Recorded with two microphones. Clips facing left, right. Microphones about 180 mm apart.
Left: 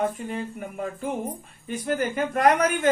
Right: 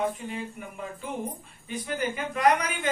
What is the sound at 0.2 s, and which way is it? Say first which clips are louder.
Speech: left 4 dB; 50° left (ahead or behind).